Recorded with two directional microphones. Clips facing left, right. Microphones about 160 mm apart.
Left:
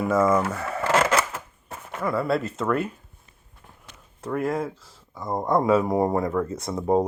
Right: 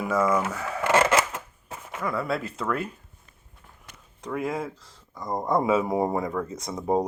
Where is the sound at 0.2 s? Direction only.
25° left (ahead or behind).